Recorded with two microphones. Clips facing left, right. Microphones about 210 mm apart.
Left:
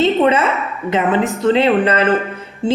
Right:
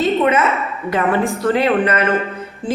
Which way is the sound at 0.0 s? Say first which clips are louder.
Left 2 dB; 30° left (ahead or behind).